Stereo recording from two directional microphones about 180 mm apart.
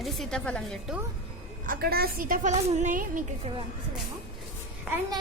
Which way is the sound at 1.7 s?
60° right (ahead or behind).